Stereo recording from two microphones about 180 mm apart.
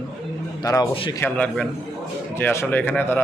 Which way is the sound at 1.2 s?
10° left (ahead or behind).